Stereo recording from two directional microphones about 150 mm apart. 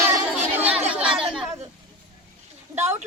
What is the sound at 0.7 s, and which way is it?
Chatter, 10° right (ahead or behind).